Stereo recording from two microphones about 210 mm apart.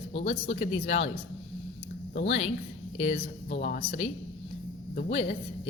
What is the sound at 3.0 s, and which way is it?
Speech, 30° left (ahead or behind).